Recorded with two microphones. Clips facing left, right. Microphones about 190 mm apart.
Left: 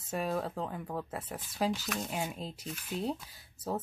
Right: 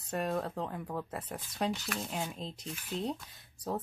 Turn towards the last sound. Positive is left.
turn(degrees=5)  # may be behind; listen again after turning